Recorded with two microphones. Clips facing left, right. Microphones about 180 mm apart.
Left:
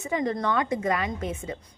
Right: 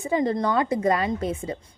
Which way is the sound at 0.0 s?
30° right (ahead or behind).